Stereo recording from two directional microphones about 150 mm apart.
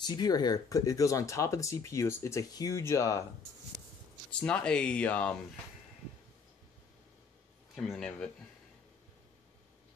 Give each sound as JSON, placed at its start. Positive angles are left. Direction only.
{"t": 0.0, "sound": "speech", "side_deg": 30}
{"t": 4.3, "sound": "speech", "side_deg": 5}
{"t": 7.7, "sound": "speech", "side_deg": 0}